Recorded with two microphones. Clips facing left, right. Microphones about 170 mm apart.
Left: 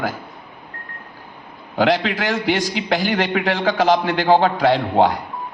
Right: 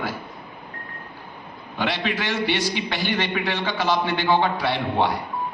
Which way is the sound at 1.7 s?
90° left.